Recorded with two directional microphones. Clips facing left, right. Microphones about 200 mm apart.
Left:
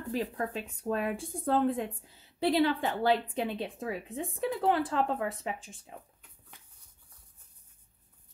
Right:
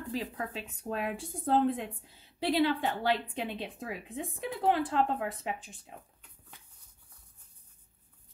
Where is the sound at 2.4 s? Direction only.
40° left (ahead or behind).